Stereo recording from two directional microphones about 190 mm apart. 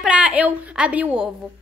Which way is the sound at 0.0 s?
5° right (ahead or behind).